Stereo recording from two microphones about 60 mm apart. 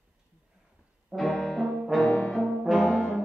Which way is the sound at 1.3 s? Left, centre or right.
Centre.